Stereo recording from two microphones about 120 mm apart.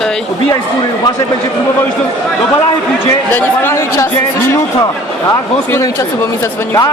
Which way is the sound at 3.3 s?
25° left (ahead or behind).